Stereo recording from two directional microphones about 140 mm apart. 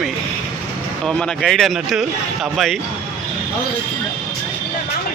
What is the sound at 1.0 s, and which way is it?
A man's voice, 5° left (ahead or behind).